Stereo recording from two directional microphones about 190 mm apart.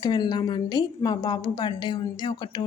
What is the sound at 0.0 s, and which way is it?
A woman's voice, 20° left (ahead or behind).